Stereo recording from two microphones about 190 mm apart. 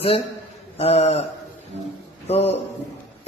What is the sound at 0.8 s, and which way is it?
Speech, 30° left (ahead or behind).